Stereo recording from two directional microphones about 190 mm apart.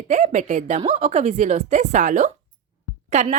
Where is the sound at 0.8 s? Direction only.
30° right (ahead or behind).